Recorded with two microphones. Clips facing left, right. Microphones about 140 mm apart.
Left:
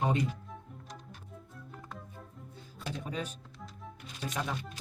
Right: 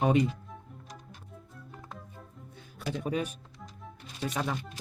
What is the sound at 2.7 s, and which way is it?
Speech, 65° right (ahead or behind).